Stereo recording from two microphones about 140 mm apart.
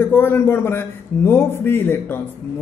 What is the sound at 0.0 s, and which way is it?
Speech, 15° left (ahead or behind).